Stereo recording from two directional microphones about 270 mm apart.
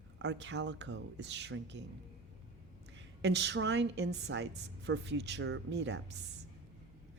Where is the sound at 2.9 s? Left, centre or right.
Right.